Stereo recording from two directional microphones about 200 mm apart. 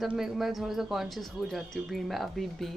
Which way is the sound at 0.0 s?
Centre (ahead or behind).